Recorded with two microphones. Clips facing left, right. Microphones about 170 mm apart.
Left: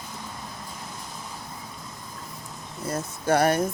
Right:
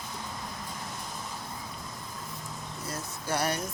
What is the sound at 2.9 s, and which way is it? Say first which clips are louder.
Speech: left 10 dB; 55° left (ahead or behind).